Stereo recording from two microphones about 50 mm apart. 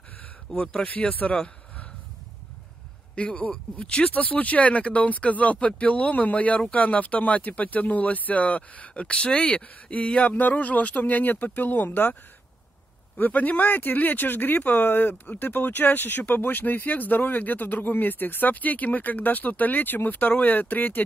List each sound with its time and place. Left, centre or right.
0.6 s speech: left
3.2 s speech: centre; by 12.2 s left
13.2 s speech: left